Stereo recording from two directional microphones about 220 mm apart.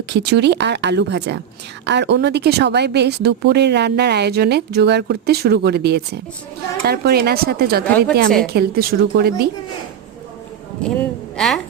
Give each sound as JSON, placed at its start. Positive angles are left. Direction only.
{"t": 0.1, "sound": "speech", "side_deg": -50}
{"t": 7.9, "sound": "a woman's voice", "side_deg": 5}
{"t": 8.4, "sound": "speech", "side_deg": -45}
{"t": 10.8, "sound": "a woman's voice", "side_deg": 5}